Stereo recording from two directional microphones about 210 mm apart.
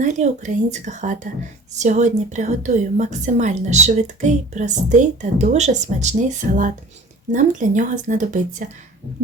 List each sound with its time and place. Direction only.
0.0 s a woman's voice: 35° right (ahead or behind)